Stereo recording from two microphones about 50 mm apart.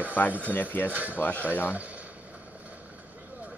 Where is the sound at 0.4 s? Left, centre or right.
Left.